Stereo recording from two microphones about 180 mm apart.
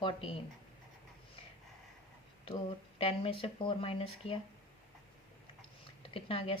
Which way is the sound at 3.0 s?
35° left (ahead or behind).